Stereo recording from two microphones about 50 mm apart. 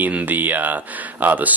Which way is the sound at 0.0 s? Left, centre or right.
Right.